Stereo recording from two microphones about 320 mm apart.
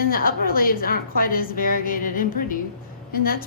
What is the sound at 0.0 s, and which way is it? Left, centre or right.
A woman's voice, left.